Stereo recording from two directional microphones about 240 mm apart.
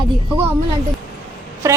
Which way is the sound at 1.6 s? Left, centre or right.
Centre.